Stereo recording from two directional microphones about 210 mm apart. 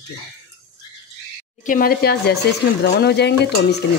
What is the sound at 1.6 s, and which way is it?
Speech, 40° left (ahead or behind).